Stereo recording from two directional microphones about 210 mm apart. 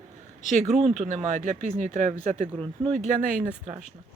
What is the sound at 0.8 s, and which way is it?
Speech, 35° right (ahead or behind).